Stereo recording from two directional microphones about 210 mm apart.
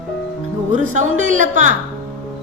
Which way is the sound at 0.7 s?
35° right (ahead or behind).